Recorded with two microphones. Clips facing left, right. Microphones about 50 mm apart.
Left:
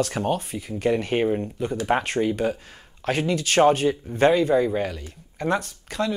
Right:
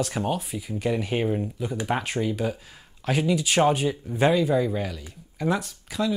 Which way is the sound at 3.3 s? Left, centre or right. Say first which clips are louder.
Even; centre.